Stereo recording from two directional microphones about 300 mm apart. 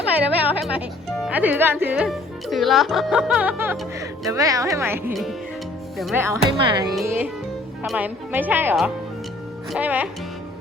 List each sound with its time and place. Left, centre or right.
0.5 s speech: centre